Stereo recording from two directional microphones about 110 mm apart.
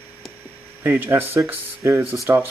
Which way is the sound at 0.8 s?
20° right (ahead or behind).